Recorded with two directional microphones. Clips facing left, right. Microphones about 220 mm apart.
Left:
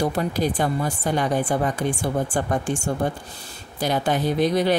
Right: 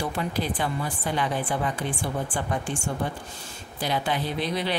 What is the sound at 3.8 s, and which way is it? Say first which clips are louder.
Speech: left 5 dB; 45° left (ahead or behind).